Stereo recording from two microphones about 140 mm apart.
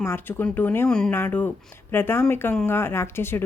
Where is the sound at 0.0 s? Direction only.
15° left (ahead or behind).